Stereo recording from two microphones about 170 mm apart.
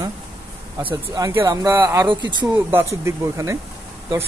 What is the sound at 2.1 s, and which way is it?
Speech, 25° right (ahead or behind).